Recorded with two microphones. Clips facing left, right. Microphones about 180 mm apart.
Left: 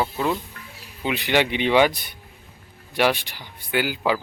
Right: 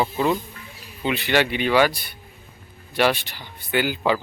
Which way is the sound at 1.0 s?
15° left (ahead or behind).